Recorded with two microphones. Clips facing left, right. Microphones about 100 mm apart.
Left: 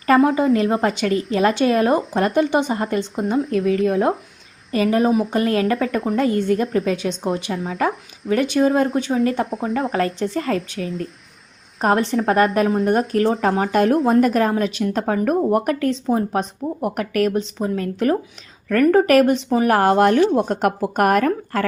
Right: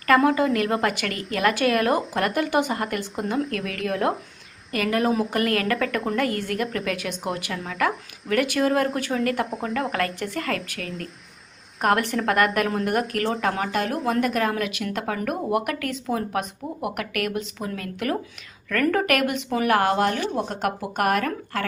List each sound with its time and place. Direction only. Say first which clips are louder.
0.3 s speech: left 4 dB; 30° left (ahead or behind)
8.3 s speech: left 4 dB; 25° left (ahead or behind)
10.8 s speech: left 7 dB; centre (ahead or behind)
11.8 s speech: left 4 dB; 30° left (ahead or behind)